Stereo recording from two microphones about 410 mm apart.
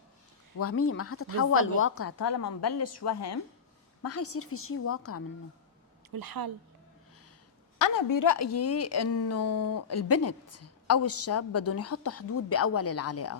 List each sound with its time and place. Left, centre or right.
0.6 s speech: left
2.3 s a woman's voice: left
2.6 s speech: left
6.1 s a woman's voice: right
7.8 s speech: left